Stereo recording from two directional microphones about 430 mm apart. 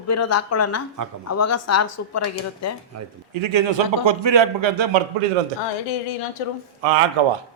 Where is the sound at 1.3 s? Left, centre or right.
Left.